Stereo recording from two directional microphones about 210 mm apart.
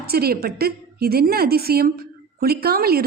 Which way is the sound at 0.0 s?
45° right (ahead or behind).